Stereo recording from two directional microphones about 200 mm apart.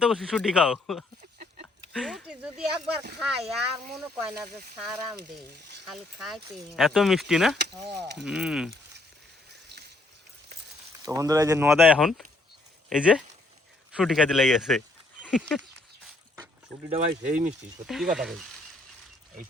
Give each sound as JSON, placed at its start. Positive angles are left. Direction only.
{"t": 0.0, "sound": "speech", "side_deg": 0}
{"t": 3.9, "sound": "speech", "side_deg": -10}
{"t": 7.9, "sound": "speech", "side_deg": -55}
{"t": 8.2, "sound": "speech", "side_deg": -5}
{"t": 11.0, "sound": "speech", "side_deg": -15}
{"t": 11.7, "sound": "speech", "side_deg": 0}
{"t": 16.9, "sound": "speech", "side_deg": -35}
{"t": 17.8, "sound": "speech", "side_deg": 0}